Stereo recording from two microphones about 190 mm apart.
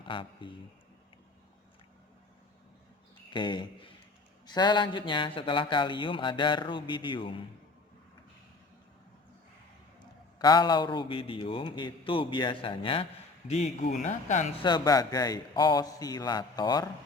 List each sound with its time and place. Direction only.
0.0 s a man's voice: 25° left (ahead or behind)
3.3 s a man's voice: 25° left (ahead or behind)
10.0 s a man's voice: 20° left (ahead or behind)
14.0 s speech: 40° left (ahead or behind)
14.6 s a man's voice: 20° left (ahead or behind)